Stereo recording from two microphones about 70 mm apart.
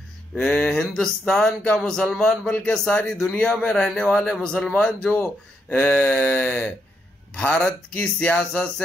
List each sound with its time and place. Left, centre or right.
0.5 s a man's voice: centre
2.9 s speech: left
3.2 s a man's voice: centre
5.1 s speech: left